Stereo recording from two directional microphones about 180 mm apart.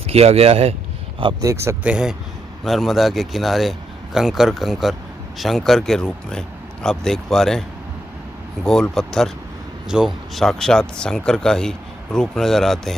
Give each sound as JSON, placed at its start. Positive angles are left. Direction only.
{"t": 0.1, "sound": "speech", "side_deg": -35}
{"t": 1.2, "sound": "a man's voice", "side_deg": -20}
{"t": 8.6, "sound": "a man's voice", "side_deg": 5}